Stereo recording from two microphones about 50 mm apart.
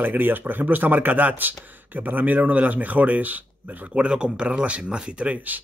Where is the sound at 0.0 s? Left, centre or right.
Right.